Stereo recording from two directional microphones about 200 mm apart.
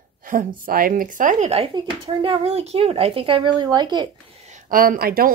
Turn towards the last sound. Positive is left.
turn(degrees=-50)  # may be behind; listen again after turning